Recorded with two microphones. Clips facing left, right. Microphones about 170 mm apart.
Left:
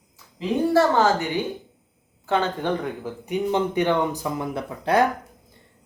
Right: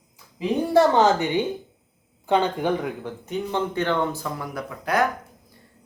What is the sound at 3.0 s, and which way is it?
Speech, 15° left (ahead or behind).